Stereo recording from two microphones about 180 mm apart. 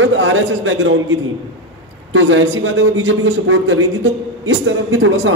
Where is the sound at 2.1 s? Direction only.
90° right.